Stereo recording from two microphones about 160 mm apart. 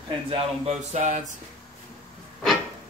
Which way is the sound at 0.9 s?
50° right (ahead or behind).